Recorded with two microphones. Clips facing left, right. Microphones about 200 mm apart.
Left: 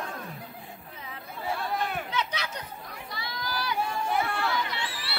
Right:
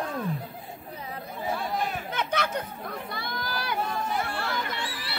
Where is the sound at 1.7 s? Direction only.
60° left (ahead or behind).